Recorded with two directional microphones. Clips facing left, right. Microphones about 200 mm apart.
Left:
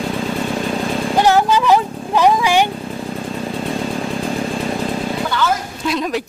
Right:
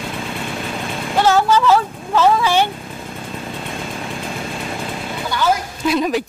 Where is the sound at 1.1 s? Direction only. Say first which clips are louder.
Even; 15° left (ahead or behind).